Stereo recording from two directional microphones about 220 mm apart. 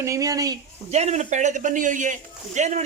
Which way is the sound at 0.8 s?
30° right (ahead or behind).